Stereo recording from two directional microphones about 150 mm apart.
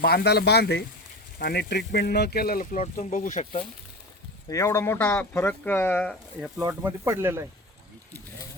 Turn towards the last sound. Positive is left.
turn(degrees=-15)  # may be behind; listen again after turning